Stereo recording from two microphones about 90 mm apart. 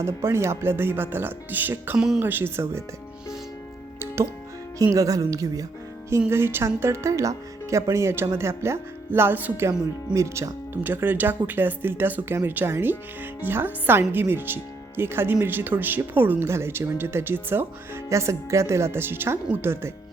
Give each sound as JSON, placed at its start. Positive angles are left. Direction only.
{"t": 0.0, "sound": "speech", "side_deg": -30}
{"t": 4.0, "sound": "music", "side_deg": -30}
{"t": 4.8, "sound": "speech", "side_deg": -35}
{"t": 10.2, "sound": "speech", "side_deg": -35}
{"t": 10.8, "sound": "speech", "side_deg": -20}